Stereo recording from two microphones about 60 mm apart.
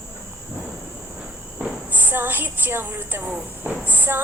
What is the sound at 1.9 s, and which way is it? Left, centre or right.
Speech, right.